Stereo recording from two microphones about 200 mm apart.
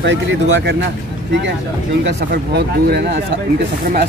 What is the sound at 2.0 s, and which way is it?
Speech, 55° right (ahead or behind).